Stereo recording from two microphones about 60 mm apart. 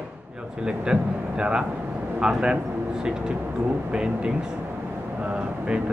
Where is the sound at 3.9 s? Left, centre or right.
Centre.